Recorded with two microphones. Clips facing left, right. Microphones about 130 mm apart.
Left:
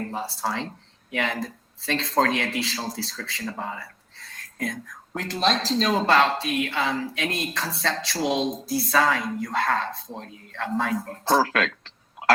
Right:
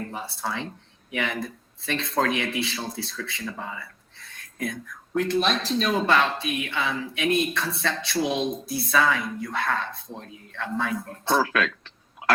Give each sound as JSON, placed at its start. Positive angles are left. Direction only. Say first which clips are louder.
{"t": 0.0, "sound": "speech", "louder": "left 3 dB", "side_deg": 35}